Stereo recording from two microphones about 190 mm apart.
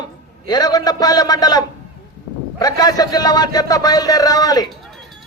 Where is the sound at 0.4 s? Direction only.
20° left (ahead or behind).